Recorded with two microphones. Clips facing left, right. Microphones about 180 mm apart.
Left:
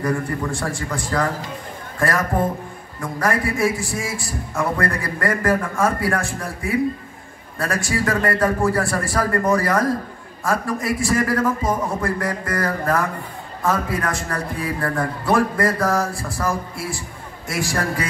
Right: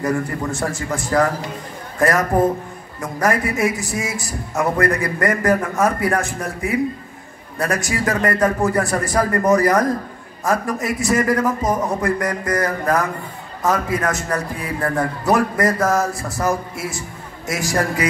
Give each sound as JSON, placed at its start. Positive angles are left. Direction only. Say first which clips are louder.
{"t": 0.0, "sound": "a man's voice", "louder": "right 1 dB", "side_deg": -25}